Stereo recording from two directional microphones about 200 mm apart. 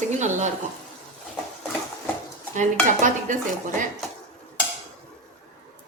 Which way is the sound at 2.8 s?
40° right (ahead or behind).